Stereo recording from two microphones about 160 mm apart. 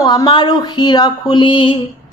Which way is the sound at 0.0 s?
25° left (ahead or behind).